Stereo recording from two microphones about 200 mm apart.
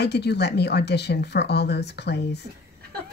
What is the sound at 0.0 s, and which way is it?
Speech, 55° left (ahead or behind).